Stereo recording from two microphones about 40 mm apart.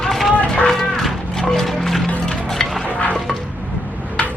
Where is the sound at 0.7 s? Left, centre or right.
Centre.